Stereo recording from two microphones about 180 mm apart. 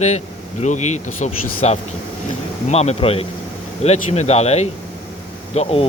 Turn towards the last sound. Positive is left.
turn(degrees=35)  # may be behind; listen again after turning